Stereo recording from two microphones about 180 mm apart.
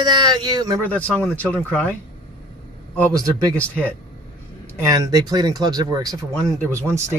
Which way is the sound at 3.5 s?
10° left (ahead or behind).